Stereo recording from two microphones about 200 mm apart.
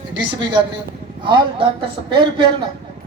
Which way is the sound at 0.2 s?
25° right (ahead or behind).